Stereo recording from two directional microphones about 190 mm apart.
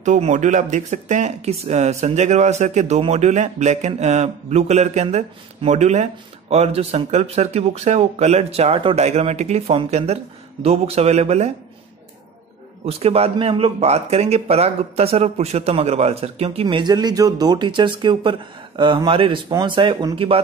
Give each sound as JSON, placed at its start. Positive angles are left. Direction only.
{"t": 0.0, "sound": "speech", "side_deg": -40}
{"t": 12.8, "sound": "speech", "side_deg": -30}